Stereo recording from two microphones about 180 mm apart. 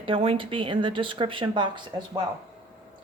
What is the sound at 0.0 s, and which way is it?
Speech, 30° right (ahead or behind).